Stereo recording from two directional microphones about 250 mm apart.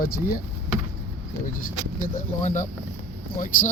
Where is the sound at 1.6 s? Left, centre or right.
Left.